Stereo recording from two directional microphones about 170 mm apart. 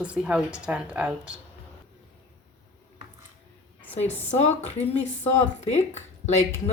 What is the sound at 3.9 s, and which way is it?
A woman's voice, 40° left (ahead or behind).